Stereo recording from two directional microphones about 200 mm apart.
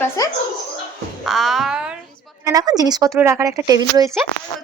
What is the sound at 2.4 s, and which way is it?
A woman's voice, 20° right (ahead or behind).